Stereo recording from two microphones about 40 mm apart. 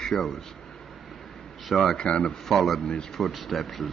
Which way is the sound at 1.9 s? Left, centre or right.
Left.